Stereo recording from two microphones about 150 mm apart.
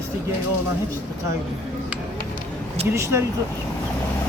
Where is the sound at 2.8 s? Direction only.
20° right (ahead or behind).